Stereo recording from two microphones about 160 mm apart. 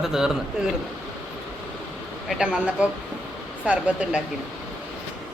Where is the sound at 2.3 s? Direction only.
5° right (ahead or behind).